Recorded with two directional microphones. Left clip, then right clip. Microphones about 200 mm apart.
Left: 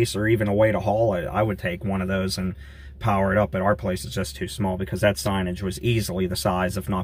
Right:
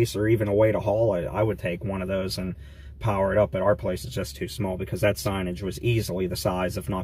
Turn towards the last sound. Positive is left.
turn(degrees=0)  # may be behind; listen again after turning